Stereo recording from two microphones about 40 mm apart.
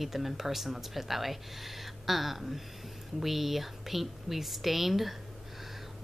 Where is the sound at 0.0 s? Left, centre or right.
Centre.